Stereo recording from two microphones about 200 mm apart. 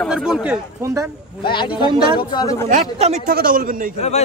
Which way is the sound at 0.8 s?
15° right (ahead or behind).